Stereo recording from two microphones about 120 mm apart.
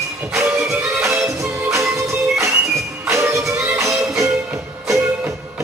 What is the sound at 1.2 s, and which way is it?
Music, 25° right (ahead or behind).